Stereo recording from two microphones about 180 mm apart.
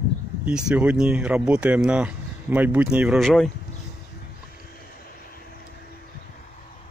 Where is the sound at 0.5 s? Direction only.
5° right (ahead or behind).